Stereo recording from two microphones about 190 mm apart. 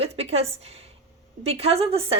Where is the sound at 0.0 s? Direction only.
30° right (ahead or behind).